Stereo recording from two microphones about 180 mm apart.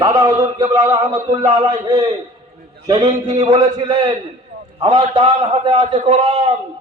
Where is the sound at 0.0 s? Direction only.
20° right (ahead or behind).